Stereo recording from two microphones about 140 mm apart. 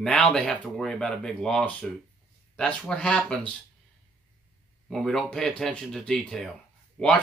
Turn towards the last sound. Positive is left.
turn(degrees=10)  # may be behind; listen again after turning